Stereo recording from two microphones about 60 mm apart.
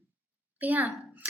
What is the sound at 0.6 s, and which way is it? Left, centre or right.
Speech, right.